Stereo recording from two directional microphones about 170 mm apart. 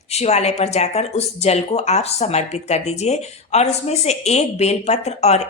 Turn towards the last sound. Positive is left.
turn(degrees=40)  # may be behind; listen again after turning